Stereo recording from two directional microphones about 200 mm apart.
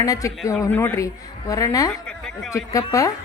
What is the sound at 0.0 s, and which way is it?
A woman's voice, 15° left (ahead or behind).